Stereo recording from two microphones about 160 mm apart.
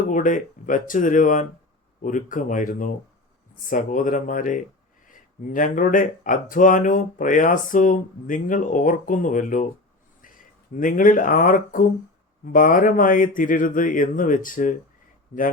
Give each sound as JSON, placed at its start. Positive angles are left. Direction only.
{"t": 0.1, "sound": "speech", "side_deg": 55}